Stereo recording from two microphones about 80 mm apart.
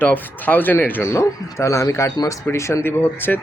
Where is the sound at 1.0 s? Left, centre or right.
Left.